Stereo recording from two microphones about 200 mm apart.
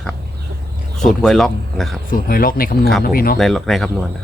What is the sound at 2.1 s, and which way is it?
Speech, 45° left (ahead or behind).